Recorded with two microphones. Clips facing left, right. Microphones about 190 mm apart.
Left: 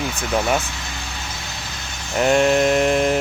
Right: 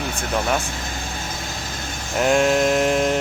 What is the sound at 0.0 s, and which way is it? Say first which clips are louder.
Vehicle: left 2 dB; 50° right (ahead or behind).